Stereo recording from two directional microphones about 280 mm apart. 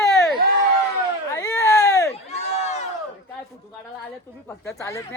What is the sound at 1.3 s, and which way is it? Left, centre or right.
Baby cry, centre.